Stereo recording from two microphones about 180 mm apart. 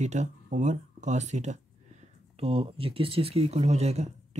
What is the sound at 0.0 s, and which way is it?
Speech, 40° right (ahead or behind).